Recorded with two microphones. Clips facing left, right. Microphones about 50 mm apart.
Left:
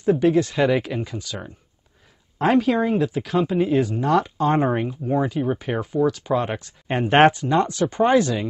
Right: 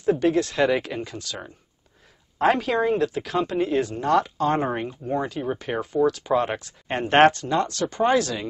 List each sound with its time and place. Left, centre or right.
0.0 s speech: centre
4.4 s speech: centre
4.6 s speech: centre